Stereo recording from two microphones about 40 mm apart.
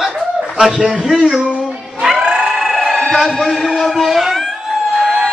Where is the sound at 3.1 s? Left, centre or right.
Centre.